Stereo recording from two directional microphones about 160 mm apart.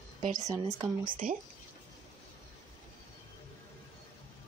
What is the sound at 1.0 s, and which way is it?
Speech, 55° right (ahead or behind).